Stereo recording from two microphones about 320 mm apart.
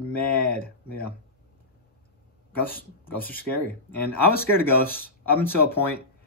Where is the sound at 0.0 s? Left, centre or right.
Centre.